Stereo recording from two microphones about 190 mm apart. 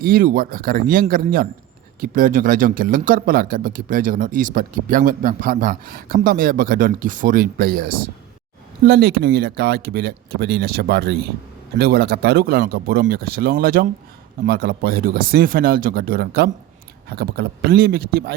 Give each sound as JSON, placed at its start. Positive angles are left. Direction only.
{"t": 0.0, "sound": "speech", "side_deg": -50}